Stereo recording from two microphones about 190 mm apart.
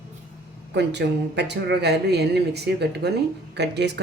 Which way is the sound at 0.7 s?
65° right (ahead or behind).